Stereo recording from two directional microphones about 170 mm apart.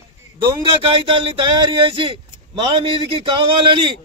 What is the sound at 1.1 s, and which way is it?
A man's voice, 30° right (ahead or behind).